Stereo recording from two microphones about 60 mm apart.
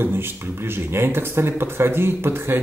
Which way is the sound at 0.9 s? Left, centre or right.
Right.